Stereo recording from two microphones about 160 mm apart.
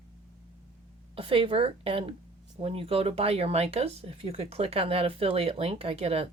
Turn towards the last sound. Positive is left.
turn(degrees=-40)  # may be behind; listen again after turning